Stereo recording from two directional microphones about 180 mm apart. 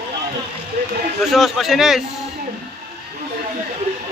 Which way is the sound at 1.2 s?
Centre (ahead or behind).